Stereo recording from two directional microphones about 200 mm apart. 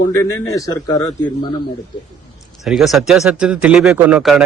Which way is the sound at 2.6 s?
Centre (ahead or behind).